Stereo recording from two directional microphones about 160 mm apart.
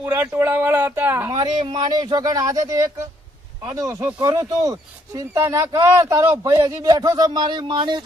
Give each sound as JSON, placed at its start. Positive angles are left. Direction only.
{"t": 0.0, "sound": "speech", "side_deg": -15}
{"t": 1.3, "sound": "speech", "side_deg": -30}